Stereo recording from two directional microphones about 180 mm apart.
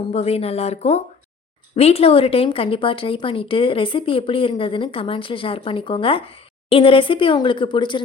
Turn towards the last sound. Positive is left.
turn(degrees=25)  # may be behind; listen again after turning